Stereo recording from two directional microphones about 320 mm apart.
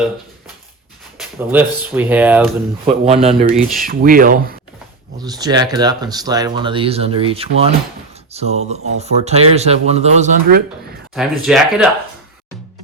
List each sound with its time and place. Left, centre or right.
1.2 s speech: centre
2.8 s speech: centre
5.2 s speech: centre
11.1 s speech: centre